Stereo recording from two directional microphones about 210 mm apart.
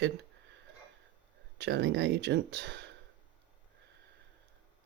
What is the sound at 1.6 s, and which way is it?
Speech, 55° right (ahead or behind).